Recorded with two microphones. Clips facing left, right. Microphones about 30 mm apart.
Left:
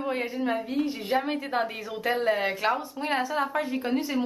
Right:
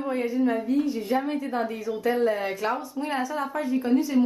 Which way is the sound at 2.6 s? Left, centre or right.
Left.